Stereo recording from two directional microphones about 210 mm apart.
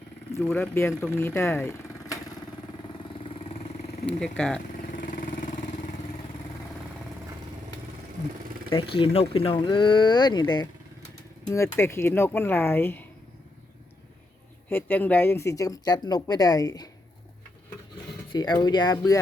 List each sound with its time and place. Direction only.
0.3 s speech: 10° left (ahead or behind)
4.0 s speech: 5° left (ahead or behind)
4.9 s vehicle: 40° left (ahead or behind)
8.7 s speech: 25° left (ahead or behind); by 13.1 s 10° left (ahead or behind)
14.7 s speech: 10° left (ahead or behind)
18.3 s speech: 20° left (ahead or behind)